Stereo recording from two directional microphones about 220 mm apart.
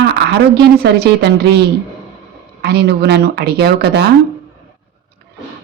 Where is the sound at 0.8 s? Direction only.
50° right (ahead or behind).